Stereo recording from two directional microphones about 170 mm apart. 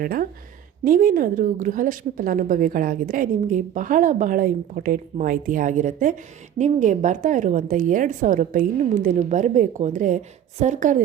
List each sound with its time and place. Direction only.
0.0 s a woman's voice: 60° right (ahead or behind)